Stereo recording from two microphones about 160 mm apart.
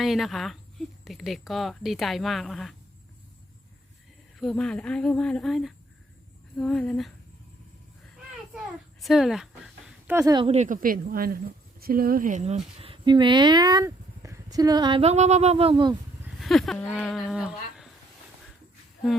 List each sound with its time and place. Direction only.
0.0 s speech: centre (ahead or behind)
4.4 s speech: centre (ahead or behind)
8.1 s a sound: centre (ahead or behind)
10.2 s speech: 20° right (ahead or behind)
10.4 s speech: 45° right (ahead or behind)
15.7 s speech: 25° right (ahead or behind)
16.4 s speech: centre (ahead or behind)